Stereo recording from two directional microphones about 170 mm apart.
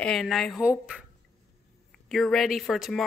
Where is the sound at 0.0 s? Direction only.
Centre (ahead or behind).